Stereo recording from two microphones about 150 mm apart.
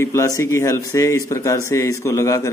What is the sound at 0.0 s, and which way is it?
Speech, 20° left (ahead or behind).